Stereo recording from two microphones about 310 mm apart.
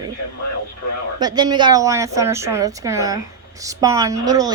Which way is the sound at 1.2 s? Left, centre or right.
Centre.